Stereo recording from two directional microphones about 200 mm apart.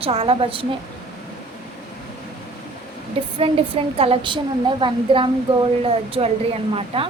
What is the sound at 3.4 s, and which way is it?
A woman's voice, 30° right (ahead or behind).